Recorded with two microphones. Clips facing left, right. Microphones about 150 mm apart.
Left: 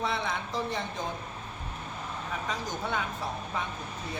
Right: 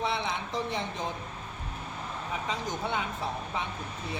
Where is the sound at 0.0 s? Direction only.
20° right (ahead or behind).